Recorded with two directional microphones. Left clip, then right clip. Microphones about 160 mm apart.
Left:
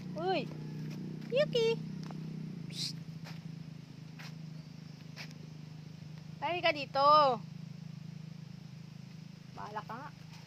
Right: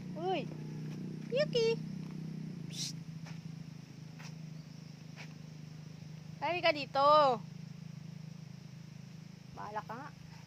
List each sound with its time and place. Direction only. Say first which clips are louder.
0.2 s vehicle: left 2 dB; 5° left (ahead or behind)
1.3 s speech: left 1 dB; centre (ahead or behind)
2.6 s cat: left 2 dB; 10° right (ahead or behind)
6.4 s speech: even; 15° right (ahead or behind)
9.6 s vehicle: even; 30° right (ahead or behind)